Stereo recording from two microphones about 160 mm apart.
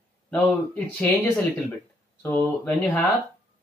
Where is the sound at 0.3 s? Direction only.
10° left (ahead or behind).